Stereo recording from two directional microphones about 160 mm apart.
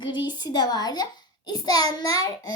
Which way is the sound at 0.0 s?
30° left (ahead or behind).